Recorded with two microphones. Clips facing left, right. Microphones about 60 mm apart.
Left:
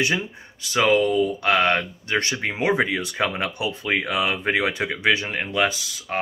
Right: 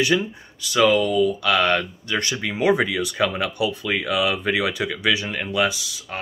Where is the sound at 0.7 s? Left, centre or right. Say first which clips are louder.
Right 1 dB; left.